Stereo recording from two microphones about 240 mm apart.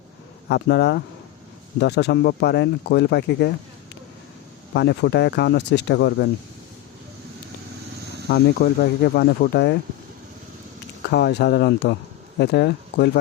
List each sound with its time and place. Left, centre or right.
0.4 s speech: left
4.7 s speech: left
8.3 s speech: left
11.1 s speech: left